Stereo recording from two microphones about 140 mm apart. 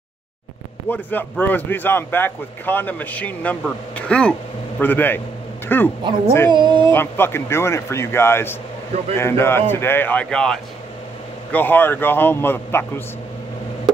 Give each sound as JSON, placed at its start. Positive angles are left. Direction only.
{"t": 0.8, "sound": "a man's voice", "side_deg": 15}
{"t": 6.5, "sound": "speech", "side_deg": -35}
{"t": 6.9, "sound": "a man's voice", "side_deg": 15}